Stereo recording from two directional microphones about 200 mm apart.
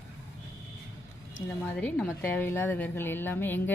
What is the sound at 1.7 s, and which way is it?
A woman's voice, 5° left (ahead or behind).